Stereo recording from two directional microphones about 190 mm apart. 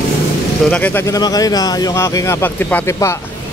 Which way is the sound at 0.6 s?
10° left (ahead or behind).